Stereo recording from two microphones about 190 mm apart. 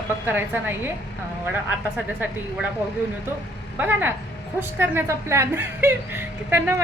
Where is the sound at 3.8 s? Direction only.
10° right (ahead or behind).